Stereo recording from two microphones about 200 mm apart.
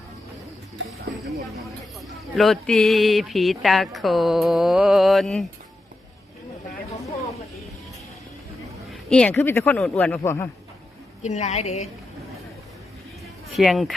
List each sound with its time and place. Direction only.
1.6 s speech: centre (ahead or behind)
8.9 s speech: 5° left (ahead or behind)
10.2 s a man's voice: 15° left (ahead or behind)
11.2 s a woman's voice: 35° left (ahead or behind)
13.6 s speech: centre (ahead or behind)